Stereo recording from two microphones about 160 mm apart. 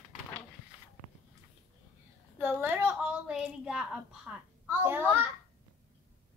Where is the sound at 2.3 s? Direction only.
10° right (ahead or behind).